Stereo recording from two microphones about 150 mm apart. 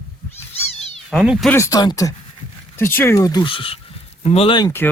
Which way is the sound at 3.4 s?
35° left (ahead or behind).